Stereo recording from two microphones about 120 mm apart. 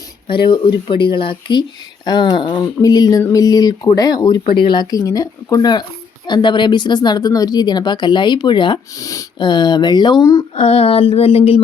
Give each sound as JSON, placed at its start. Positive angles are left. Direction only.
{"t": 0.3, "sound": "speech", "side_deg": 45}
{"t": 9.0, "sound": "speech", "side_deg": 30}
{"t": 10.5, "sound": "a sound", "side_deg": 55}